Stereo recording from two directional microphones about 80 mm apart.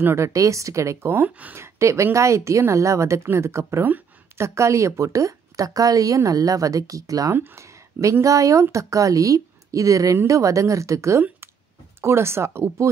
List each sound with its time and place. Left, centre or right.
0.0 s a woman's voice: right
1.1 s speech: right
1.6 s a woman's voice: right